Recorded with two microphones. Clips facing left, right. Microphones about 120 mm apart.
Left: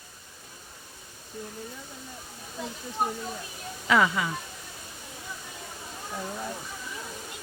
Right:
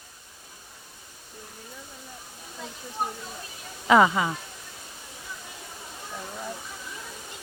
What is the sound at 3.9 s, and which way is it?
Speech, 30° right (ahead or behind).